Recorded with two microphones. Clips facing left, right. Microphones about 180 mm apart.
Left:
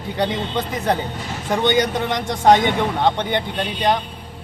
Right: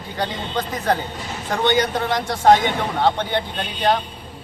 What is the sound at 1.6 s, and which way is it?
Speech, 20° left (ahead or behind).